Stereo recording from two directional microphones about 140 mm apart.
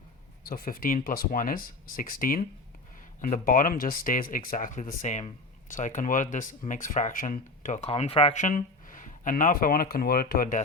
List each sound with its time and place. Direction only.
0.4 s speech: 90° left
3.2 s speech: 70° left (ahead or behind)
7.9 s speech: 45° left (ahead or behind)
8.4 s speech: 65° left (ahead or behind); by 10.6 s 90° left